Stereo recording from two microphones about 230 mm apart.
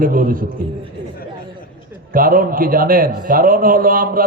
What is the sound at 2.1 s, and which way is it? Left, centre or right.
A man's voice, right.